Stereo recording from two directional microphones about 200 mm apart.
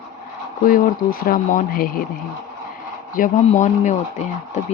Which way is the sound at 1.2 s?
45° left (ahead or behind).